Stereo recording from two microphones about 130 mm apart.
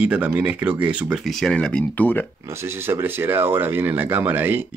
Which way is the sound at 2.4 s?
20° right (ahead or behind).